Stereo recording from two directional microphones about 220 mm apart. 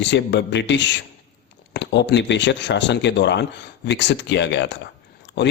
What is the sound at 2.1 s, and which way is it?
Speech, 55° left (ahead or behind).